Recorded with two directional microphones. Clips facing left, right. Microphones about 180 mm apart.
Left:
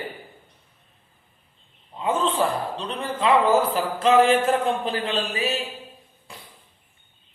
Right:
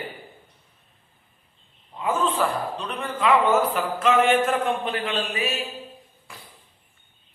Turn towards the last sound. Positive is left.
turn(degrees=30)  # may be behind; listen again after turning